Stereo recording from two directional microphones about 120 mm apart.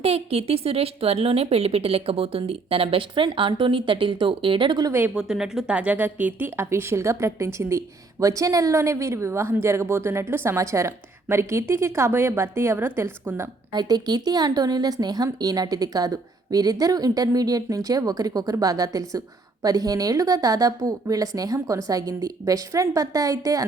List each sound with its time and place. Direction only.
0.0 s a woman's voice: 55° right (ahead or behind)
4.9 s a woman's voice: 15° right (ahead or behind)
5.1 s speech: 5° right (ahead or behind); by 13.5 s 20° right (ahead or behind)
13.7 s speech: 35° right (ahead or behind)